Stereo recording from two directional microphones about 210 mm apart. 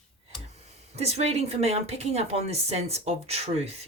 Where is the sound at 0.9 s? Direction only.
30° right (ahead or behind).